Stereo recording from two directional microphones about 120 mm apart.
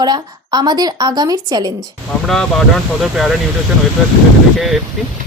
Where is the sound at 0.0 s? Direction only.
35° right (ahead or behind).